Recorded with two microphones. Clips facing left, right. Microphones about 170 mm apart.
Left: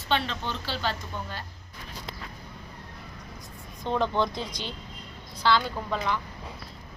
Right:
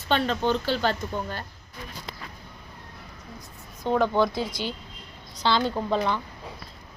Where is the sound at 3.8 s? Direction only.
5° right (ahead or behind).